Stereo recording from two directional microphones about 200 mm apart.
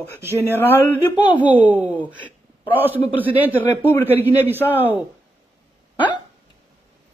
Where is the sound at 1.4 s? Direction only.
10° right (ahead or behind).